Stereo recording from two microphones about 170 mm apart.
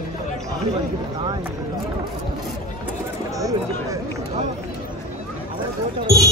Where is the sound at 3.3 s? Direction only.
20° right (ahead or behind).